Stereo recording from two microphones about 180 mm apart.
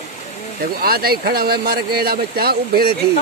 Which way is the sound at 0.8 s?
55° right (ahead or behind).